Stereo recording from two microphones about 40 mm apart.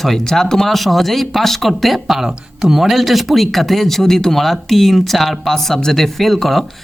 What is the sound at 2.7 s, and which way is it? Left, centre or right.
Speech, centre.